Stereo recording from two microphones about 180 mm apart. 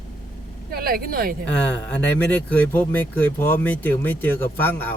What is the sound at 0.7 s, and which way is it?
Speech, 55° right (ahead or behind).